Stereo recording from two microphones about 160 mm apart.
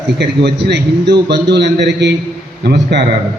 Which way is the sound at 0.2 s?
90° right.